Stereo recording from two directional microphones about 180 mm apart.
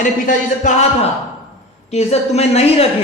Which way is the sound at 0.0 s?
45° left (ahead or behind).